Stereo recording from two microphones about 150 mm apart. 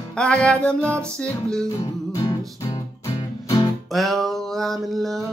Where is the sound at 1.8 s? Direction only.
25° left (ahead or behind).